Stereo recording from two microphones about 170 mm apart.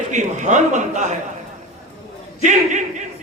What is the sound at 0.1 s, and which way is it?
A man's voice, 45° right (ahead or behind).